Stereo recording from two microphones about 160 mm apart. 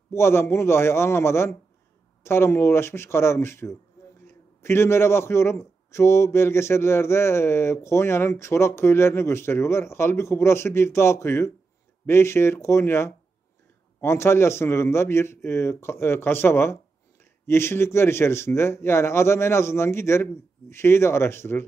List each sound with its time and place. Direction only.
0.1 s a man's voice: 15° left (ahead or behind)